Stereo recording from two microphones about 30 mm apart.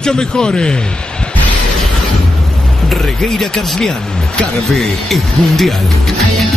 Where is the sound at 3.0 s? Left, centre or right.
Centre; by 4.5 s left.